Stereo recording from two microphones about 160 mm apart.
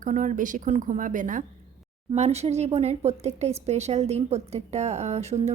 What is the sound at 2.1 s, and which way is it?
A woman's voice, 45° right (ahead or behind).